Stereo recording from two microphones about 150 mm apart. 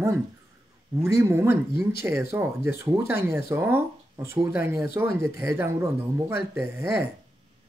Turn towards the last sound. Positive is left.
turn(degrees=-15)  # may be behind; listen again after turning